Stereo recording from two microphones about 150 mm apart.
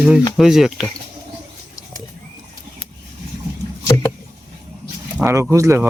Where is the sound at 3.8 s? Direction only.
20° left (ahead or behind).